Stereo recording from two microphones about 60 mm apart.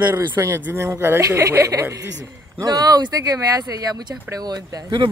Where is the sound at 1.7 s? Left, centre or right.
Right.